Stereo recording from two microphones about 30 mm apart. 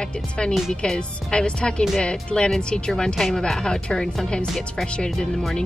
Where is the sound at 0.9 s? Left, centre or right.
Left.